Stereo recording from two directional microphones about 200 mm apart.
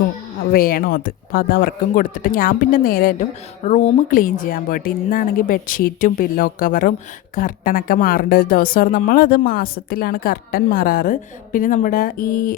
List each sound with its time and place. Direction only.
0.5 s speech: 45° left (ahead or behind)